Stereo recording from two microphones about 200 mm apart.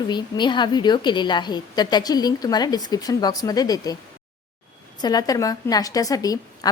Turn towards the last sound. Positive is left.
turn(degrees=15)  # may be behind; listen again after turning